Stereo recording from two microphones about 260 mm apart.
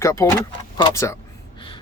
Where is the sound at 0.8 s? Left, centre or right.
Centre.